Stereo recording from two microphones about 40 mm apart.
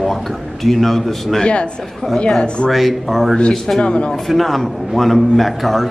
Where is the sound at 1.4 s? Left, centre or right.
Left.